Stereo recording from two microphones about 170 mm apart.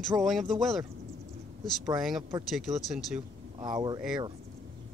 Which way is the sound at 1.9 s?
5° right (ahead or behind).